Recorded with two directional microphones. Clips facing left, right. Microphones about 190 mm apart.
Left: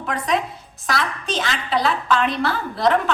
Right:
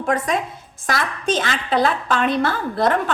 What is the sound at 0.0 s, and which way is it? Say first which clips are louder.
A woman's voice: right 2 dB; 45° right (ahead or behind).